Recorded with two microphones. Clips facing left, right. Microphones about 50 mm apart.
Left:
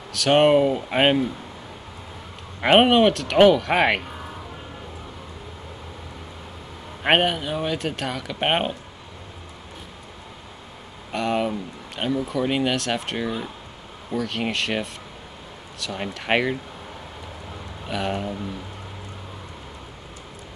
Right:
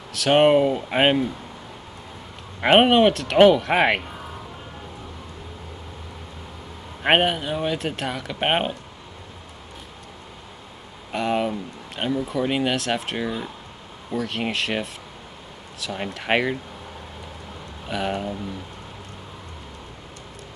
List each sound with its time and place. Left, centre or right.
0.1 s speech: centre
2.6 s speech: centre
7.0 s speech: centre
11.1 s speech: centre
17.8 s speech: centre